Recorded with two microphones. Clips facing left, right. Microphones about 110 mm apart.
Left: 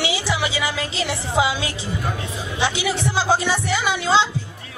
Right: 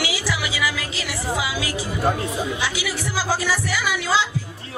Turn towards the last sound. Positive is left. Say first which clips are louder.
# left 3 dB
turn(degrees=25)  # may be behind; listen again after turning